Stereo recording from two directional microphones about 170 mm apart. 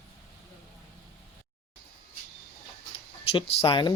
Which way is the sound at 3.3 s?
30° left (ahead or behind).